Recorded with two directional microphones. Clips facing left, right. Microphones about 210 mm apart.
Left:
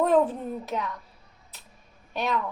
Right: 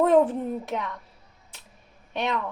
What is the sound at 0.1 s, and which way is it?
Speech, 25° right (ahead or behind).